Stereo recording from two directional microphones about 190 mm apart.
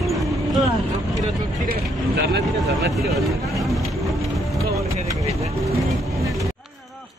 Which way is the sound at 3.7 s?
Centre (ahead or behind).